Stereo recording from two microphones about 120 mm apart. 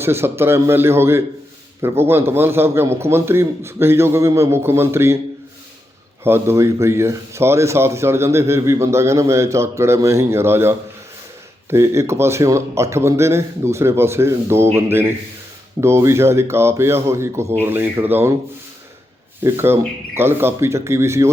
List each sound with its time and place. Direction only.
0.0 s a man's voice: 20° right (ahead or behind)
6.2 s a man's voice: 20° right (ahead or behind)
19.4 s a man's voice: 20° right (ahead or behind)